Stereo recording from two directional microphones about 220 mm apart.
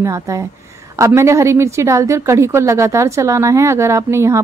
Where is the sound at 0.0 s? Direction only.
15° right (ahead or behind).